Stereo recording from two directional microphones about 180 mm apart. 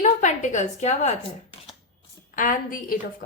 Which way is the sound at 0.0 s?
40° left (ahead or behind).